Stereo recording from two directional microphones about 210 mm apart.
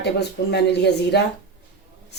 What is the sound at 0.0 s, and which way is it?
Speech, 50° left (ahead or behind).